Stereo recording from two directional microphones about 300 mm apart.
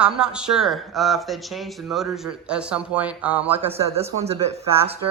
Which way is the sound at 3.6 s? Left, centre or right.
Centre.